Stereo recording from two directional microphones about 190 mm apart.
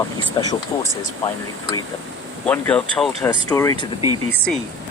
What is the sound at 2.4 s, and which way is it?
Speech, 10° left (ahead or behind).